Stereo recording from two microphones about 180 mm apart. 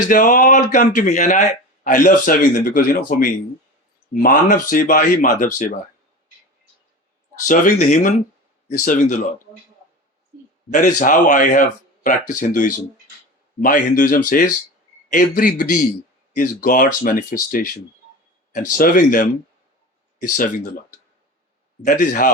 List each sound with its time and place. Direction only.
0.1 s speech: 50° left (ahead or behind)
7.4 s speech: 45° left (ahead or behind)
10.7 s speech: 45° left (ahead or behind)
13.6 s speech: 50° left (ahead or behind)
21.8 s speech: 45° left (ahead or behind)